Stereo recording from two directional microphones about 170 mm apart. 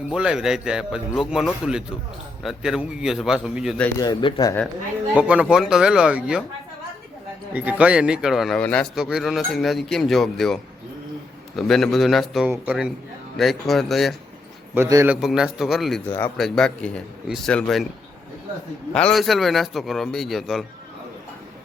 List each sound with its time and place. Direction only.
0.1 s a man's voice: 5° right (ahead or behind)
3.9 s speech: 20° left (ahead or behind)
5.1 s a man's voice: 5° right (ahead or behind)
7.5 s a man's voice: 10° right (ahead or behind)
14.8 s a man's voice: 15° right (ahead or behind)
15.1 s a man's voice: 5° right (ahead or behind)
16.0 s a man's voice: 10° left (ahead or behind)
18.9 s a man's voice: 5° left (ahead or behind)